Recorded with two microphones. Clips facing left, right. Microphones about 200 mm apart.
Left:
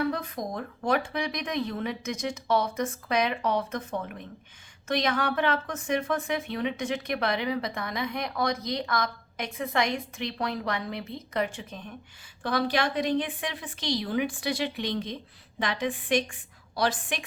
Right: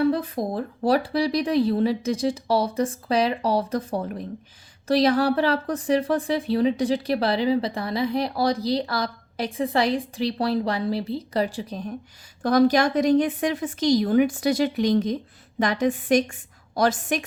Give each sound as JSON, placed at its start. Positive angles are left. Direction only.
{"t": 0.0, "sound": "a woman's voice", "side_deg": -30}